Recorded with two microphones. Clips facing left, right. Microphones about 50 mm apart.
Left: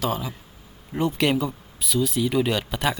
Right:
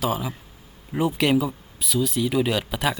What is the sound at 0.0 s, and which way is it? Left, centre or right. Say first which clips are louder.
A man's voice: right 1 dB; centre.